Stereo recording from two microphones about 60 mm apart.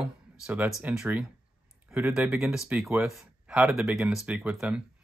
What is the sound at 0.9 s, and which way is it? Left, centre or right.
Speech, right.